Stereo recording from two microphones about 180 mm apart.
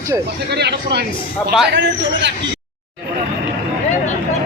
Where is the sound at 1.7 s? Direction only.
90° right.